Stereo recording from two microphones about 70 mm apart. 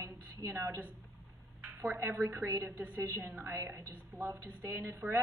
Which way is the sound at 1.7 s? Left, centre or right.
Right.